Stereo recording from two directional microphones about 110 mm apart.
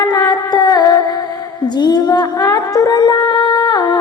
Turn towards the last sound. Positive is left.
turn(degrees=40)  # may be behind; listen again after turning